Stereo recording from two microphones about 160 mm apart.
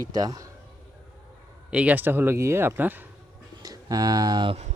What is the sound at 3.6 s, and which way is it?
Speech, 25° right (ahead or behind).